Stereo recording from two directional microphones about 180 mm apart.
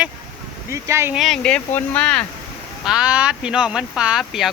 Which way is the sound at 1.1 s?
Centre (ahead or behind).